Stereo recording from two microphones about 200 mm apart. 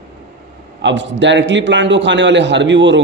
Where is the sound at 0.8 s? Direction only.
65° right (ahead or behind).